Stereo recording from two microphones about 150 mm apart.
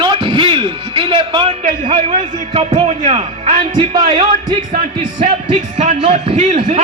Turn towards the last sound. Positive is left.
turn(degrees=-50)  # may be behind; listen again after turning